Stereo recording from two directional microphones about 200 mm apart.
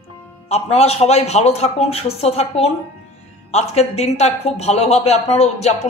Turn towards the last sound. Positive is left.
turn(degrees=35)  # may be behind; listen again after turning